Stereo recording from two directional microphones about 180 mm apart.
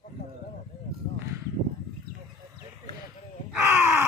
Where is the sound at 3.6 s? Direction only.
15° right (ahead or behind).